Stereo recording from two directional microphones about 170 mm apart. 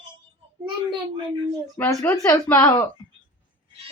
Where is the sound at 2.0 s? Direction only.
15° left (ahead or behind).